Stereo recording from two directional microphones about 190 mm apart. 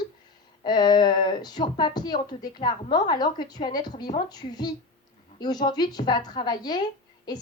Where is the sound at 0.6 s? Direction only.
20° left (ahead or behind).